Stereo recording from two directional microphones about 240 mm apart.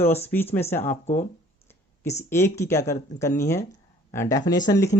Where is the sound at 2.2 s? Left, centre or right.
Centre.